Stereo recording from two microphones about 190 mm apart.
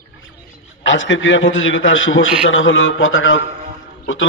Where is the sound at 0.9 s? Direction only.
80° left.